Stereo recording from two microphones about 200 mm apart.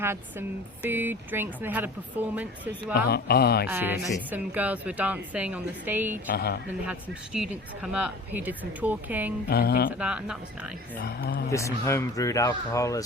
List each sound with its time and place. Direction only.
0.0 s speech: 10° right (ahead or behind)
3.1 s speech: 55° left (ahead or behind)
3.7 s speech: 10° right (ahead or behind)
6.3 s speech: 50° left (ahead or behind)
6.8 s speech: 5° right (ahead or behind)
9.5 s speech: 50° left (ahead or behind)
9.9 s speech: 5° right (ahead or behind)
11.0 s speech: 50° left (ahead or behind)
11.5 s speech: 15° left (ahead or behind)